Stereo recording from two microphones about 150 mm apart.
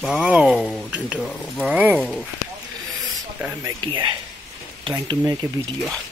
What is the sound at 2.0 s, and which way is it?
Speech, centre (ahead or behind).